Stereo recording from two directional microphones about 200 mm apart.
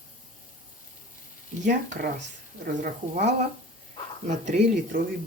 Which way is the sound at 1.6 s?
40° right (ahead or behind).